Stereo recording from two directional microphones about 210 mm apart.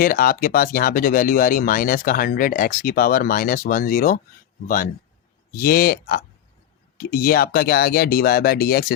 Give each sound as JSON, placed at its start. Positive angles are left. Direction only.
{"t": 0.0, "sound": "speech", "side_deg": 45}
{"t": 5.5, "sound": "speech", "side_deg": 45}